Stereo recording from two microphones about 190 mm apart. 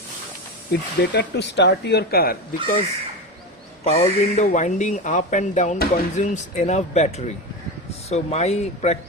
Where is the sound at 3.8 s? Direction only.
35° left (ahead or behind).